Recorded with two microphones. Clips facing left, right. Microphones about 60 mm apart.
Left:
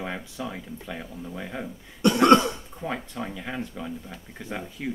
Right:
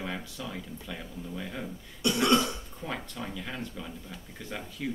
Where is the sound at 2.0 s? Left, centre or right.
Left.